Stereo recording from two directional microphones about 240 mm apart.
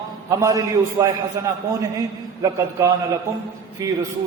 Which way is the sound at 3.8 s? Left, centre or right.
Centre.